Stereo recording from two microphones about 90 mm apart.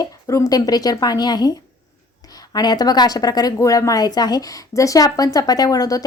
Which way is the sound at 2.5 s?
50° left (ahead or behind).